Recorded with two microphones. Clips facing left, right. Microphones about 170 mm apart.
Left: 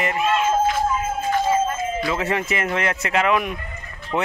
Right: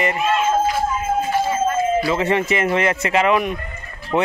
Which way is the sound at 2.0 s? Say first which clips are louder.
Right 4 dB; centre (ahead or behind).